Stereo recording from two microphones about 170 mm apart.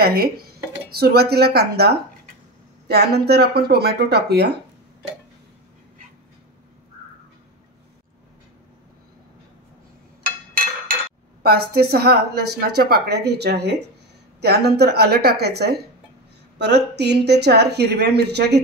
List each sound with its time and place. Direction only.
0.0 s a woman's voice: 60° right (ahead or behind)
11.4 s a woman's voice: 65° right (ahead or behind)